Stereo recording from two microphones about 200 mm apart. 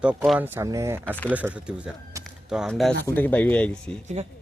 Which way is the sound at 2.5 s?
Centre (ahead or behind).